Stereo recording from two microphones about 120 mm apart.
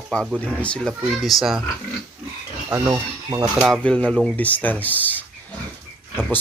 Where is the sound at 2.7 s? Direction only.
20° right (ahead or behind).